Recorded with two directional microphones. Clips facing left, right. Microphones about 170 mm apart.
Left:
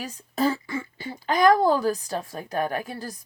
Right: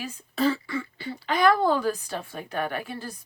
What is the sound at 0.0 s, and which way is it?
A woman's voice, 45° left (ahead or behind).